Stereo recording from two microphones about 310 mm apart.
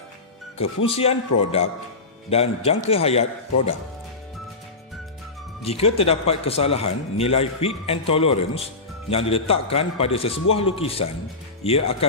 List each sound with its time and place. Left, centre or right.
0.9 s a man's voice: centre
5.6 s a man's voice: centre